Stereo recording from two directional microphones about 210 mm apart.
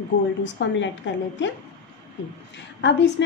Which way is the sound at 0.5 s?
60° left (ahead or behind).